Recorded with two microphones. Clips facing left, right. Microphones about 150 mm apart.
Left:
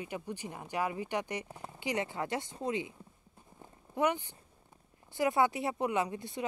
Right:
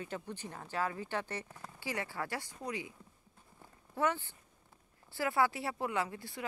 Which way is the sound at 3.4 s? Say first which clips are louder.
Left 5 dB; 20° left (ahead or behind).